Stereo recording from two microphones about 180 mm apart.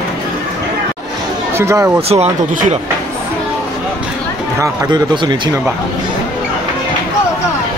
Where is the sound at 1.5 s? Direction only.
15° right (ahead or behind).